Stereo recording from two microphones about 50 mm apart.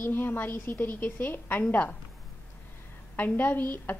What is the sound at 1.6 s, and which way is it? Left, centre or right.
Speech, left.